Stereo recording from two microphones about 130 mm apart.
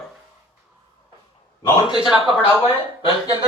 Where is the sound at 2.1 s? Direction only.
Centre (ahead or behind).